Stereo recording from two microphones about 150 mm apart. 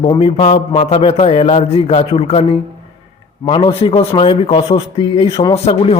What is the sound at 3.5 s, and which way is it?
A man's voice, 35° left (ahead or behind).